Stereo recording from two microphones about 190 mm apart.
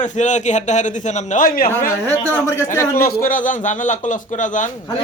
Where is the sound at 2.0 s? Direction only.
15° left (ahead or behind).